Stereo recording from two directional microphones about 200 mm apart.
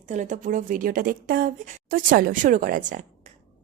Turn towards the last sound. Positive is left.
turn(degrees=-40)  # may be behind; listen again after turning